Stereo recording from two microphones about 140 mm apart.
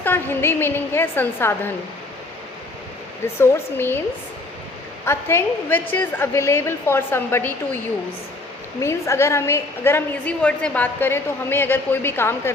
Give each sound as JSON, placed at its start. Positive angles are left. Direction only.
{"t": 0.0, "sound": "a woman's voice", "side_deg": 15}
{"t": 3.3, "sound": "a woman's voice", "side_deg": 15}
{"t": 5.0, "sound": "a woman's voice", "side_deg": 15}
{"t": 8.8, "sound": "a woman's voice", "side_deg": 20}